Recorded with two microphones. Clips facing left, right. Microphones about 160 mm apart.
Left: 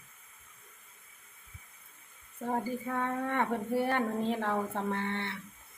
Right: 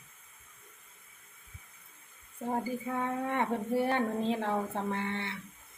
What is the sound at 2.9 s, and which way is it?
Speech, 15° right (ahead or behind).